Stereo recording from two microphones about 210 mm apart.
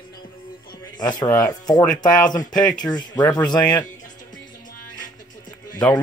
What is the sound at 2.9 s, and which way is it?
Speech, 20° left (ahead or behind).